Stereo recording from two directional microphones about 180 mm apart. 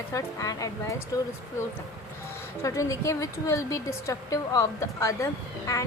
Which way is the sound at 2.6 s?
15° left (ahead or behind).